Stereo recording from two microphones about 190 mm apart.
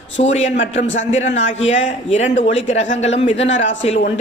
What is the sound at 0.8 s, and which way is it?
Speech, 75° left (ahead or behind).